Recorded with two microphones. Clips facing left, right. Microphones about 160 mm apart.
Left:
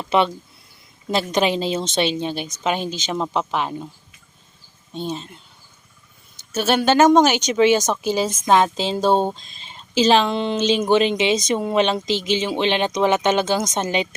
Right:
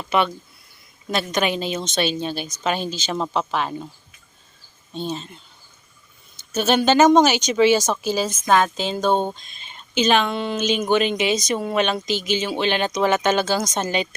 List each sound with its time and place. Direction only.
0.0 s a woman's voice: 25° left (ahead or behind)
4.9 s speech: 10° left (ahead or behind)
6.5 s a woman's voice: 10° left (ahead or behind)